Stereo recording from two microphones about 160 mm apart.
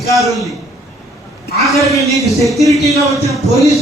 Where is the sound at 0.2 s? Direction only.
Centre (ahead or behind).